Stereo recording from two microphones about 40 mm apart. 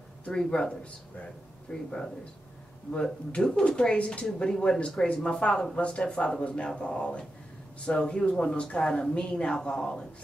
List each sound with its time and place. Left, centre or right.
0.5 s speech: left
3.3 s speech: left